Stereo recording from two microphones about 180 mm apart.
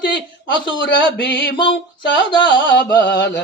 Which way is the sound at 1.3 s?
75° left (ahead or behind).